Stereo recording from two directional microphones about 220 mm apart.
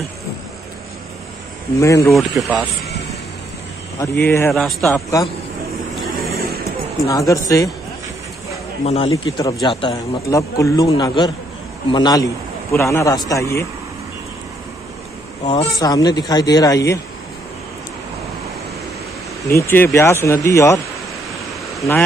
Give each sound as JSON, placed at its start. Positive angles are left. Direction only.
{"t": 1.8, "sound": "speech", "side_deg": 15}
{"t": 2.0, "sound": "a man's voice", "side_deg": 0}
{"t": 4.0, "sound": "speech", "side_deg": 15}
{"t": 4.5, "sound": "a man's voice", "side_deg": 0}
{"t": 6.0, "sound": "vehicle", "side_deg": 0}
{"t": 7.1, "sound": "speech", "side_deg": 15}
{"t": 8.8, "sound": "a man's voice", "side_deg": 30}
{"t": 9.1, "sound": "a man's voice", "side_deg": 15}
{"t": 15.4, "sound": "speech", "side_deg": 20}
{"t": 19.4, "sound": "speech", "side_deg": 15}